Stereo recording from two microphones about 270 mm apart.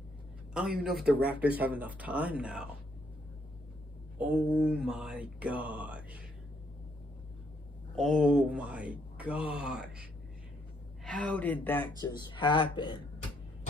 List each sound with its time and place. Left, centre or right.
0.6 s speech: centre
4.5 s speech: centre
7.9 s speech: centre
11.1 s speech: centre